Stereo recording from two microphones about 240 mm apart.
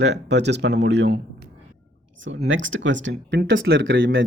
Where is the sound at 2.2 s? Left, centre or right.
Right.